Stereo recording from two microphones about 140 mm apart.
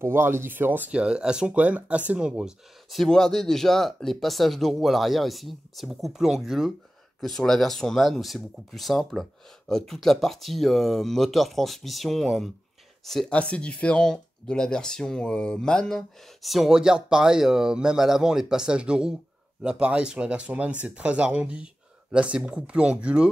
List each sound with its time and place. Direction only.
0.0 s speech: 15° right (ahead or behind)